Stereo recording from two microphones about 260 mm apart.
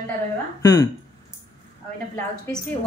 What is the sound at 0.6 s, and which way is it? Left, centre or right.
Speech, centre.